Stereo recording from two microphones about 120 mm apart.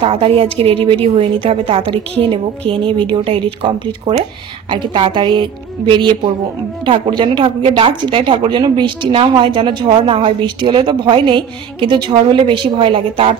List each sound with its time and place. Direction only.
0.0 s a woman's voice: 50° right (ahead or behind)